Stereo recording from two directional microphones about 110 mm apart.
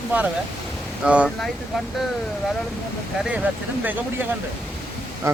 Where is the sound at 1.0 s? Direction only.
10° right (ahead or behind).